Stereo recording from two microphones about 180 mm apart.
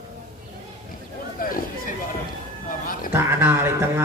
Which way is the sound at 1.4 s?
50° left (ahead or behind).